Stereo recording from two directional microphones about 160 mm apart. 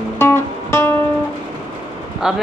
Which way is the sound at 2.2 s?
5° right (ahead or behind).